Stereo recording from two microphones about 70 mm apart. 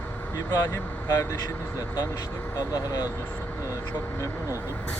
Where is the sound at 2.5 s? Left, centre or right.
Left.